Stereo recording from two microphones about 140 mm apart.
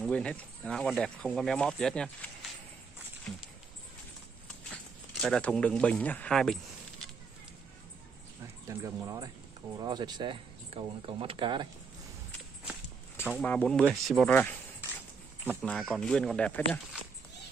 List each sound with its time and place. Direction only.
0.0 s speech: 10° left (ahead or behind)
5.2 s speech: 5° left (ahead or behind)
8.6 s speech: 25° right (ahead or behind)
13.4 s speech: 10° left (ahead or behind)
14.3 s speech: 10° left (ahead or behind)